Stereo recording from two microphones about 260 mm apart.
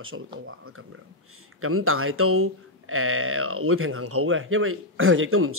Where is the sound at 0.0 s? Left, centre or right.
Right.